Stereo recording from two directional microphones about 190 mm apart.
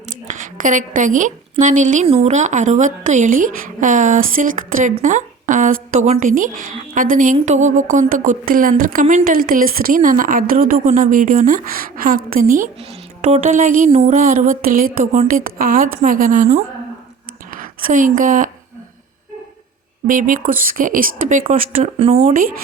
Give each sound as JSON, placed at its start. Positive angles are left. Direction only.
{"t": 0.3, "sound": "a woman's voice", "side_deg": -45}
{"t": 20.1, "sound": "a woman's voice", "side_deg": -45}
{"t": 21.9, "sound": "a woman's voice", "side_deg": -35}